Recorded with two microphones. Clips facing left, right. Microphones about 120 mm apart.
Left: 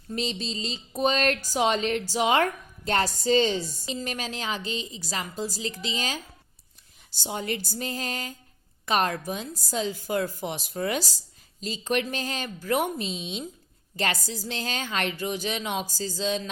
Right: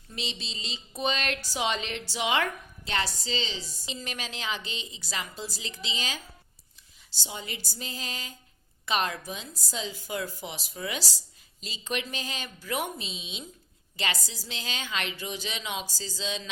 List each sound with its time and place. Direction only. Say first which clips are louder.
0.1 s speech: left 8 dB; 40° left (ahead or behind)